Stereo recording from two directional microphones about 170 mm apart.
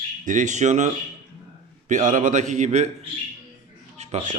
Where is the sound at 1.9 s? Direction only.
50° right (ahead or behind).